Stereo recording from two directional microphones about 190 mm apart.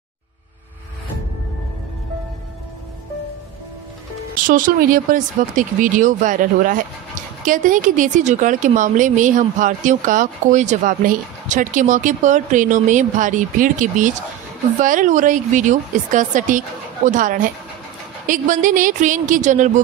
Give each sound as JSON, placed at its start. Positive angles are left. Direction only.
{"t": 4.4, "sound": "speech", "side_deg": -45}